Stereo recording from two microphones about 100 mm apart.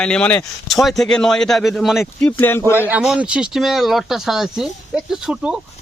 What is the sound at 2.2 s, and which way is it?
Speech, 20° left (ahead or behind).